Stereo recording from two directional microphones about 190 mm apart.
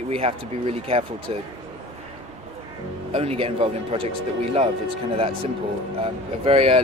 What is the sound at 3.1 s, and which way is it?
Speech, 30° right (ahead or behind).